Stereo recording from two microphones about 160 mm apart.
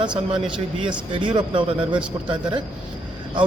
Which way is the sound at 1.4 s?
30° right (ahead or behind).